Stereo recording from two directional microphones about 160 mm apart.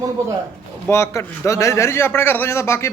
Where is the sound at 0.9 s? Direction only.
15° left (ahead or behind).